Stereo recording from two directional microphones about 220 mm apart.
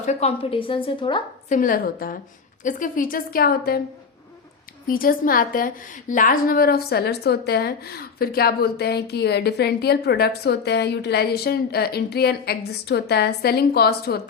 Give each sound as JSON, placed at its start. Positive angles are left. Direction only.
{"t": 0.0, "sound": "a woman's voice", "side_deg": 30}
{"t": 1.5, "sound": "a woman's voice", "side_deg": 35}
{"t": 4.9, "sound": "a woman's voice", "side_deg": 40}